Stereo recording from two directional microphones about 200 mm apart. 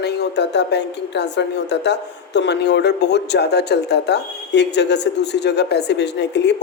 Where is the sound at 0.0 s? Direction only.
55° left (ahead or behind).